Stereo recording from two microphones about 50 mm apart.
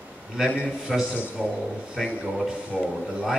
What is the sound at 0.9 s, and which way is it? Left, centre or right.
A man's voice, centre.